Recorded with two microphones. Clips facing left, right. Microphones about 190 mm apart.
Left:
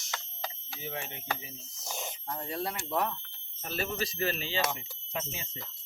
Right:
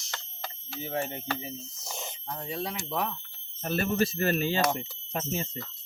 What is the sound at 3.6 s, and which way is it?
Speech, 55° right (ahead or behind).